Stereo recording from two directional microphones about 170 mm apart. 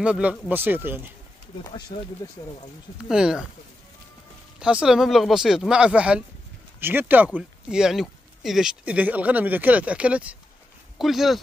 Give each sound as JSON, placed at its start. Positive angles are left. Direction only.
{"t": 0.0, "sound": "speech", "side_deg": -5}
{"t": 1.9, "sound": "speech", "side_deg": 35}
{"t": 3.1, "sound": "speech", "side_deg": -5}
{"t": 4.6, "sound": "speech", "side_deg": -5}